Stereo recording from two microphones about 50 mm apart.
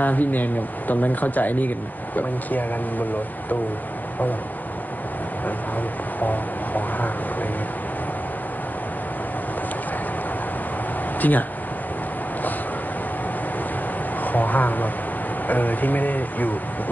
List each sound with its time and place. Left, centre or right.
0.0 s speech: left
6.1 s a sound: left
11.1 s speech: left
14.2 s speech: left